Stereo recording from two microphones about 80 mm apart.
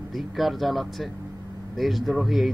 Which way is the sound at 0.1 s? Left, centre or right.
Centre.